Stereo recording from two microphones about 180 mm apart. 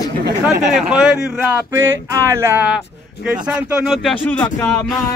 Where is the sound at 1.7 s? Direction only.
15° right (ahead or behind).